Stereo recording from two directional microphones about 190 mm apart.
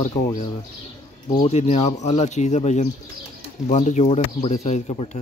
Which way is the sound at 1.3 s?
30° left (ahead or behind).